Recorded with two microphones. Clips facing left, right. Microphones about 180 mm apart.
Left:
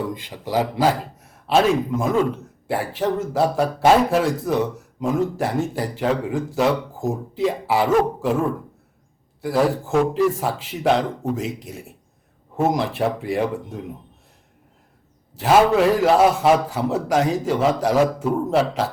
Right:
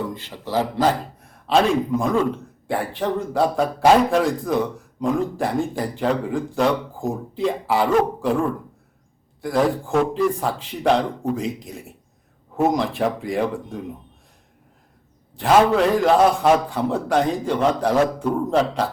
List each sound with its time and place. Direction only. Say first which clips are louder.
0.1 s a man's voice: left 1 dB; 15° left (ahead or behind)
15.4 s a man's voice: even; 5° left (ahead or behind)